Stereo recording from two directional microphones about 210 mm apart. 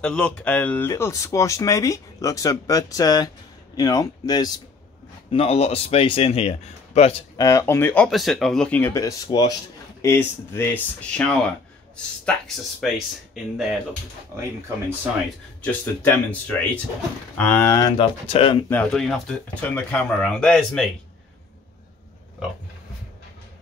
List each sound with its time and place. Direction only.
0.0 s speech: 5° left (ahead or behind)
5.3 s speech: 30° left (ahead or behind)
7.4 s speech: 15° left (ahead or behind)
15.6 s speech: 10° left (ahead or behind); by 18.6 s 25° left (ahead or behind)
18.7 s speech: 5° left (ahead or behind)